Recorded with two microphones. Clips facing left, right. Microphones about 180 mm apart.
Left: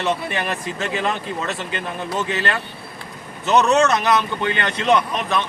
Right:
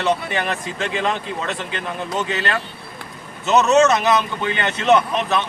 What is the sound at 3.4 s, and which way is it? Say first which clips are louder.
Speech: right 2 dB; 5° right (ahead or behind).